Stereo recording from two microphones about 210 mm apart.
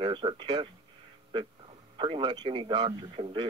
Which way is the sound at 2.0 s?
25° right (ahead or behind).